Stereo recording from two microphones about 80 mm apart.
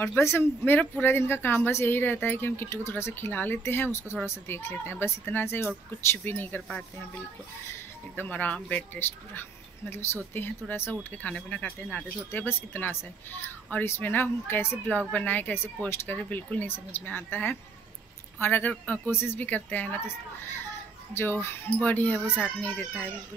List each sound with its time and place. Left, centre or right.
0.0 s speech: left
8.2 s speech: centre
21.6 s speech: centre
22.2 s speech: centre
22.6 s speech: left